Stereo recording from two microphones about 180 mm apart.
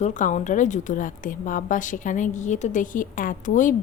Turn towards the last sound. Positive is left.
turn(degrees=45)  # may be behind; listen again after turning